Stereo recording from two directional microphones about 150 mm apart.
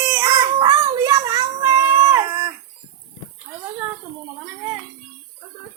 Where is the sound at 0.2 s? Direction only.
25° right (ahead or behind).